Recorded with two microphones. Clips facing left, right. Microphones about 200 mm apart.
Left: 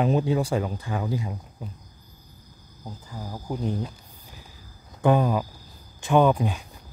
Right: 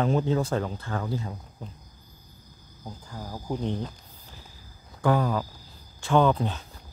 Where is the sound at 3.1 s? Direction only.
5° left (ahead or behind).